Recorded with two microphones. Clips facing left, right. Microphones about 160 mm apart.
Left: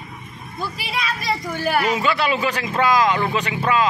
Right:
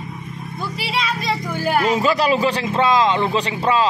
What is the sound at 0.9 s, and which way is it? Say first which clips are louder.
A child's voice: right 2 dB; 25° right (ahead or behind).